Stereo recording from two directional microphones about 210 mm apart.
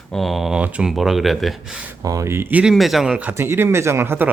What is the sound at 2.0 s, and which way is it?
Speech, 15° right (ahead or behind).